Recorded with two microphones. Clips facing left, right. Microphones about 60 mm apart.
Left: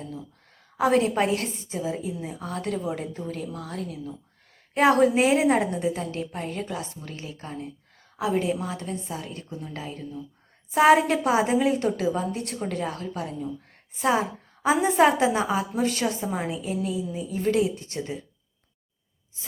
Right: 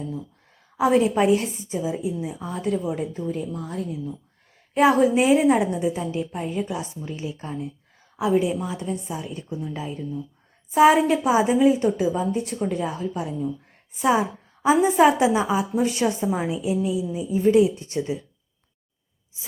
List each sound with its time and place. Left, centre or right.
0.8 s a woman's voice: centre
8.1 s a woman's voice: centre
9.8 s a woman's voice: centre
15.9 s speech: right
16.2 s a woman's voice: centre
17.7 s speech: right